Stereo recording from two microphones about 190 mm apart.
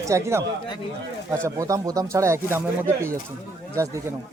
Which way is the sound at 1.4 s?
15° right (ahead or behind).